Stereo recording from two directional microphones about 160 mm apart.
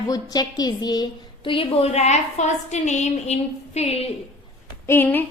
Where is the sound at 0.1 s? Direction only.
25° left (ahead or behind).